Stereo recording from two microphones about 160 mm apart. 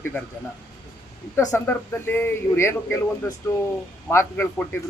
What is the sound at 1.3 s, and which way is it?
A man's voice, 15° left (ahead or behind).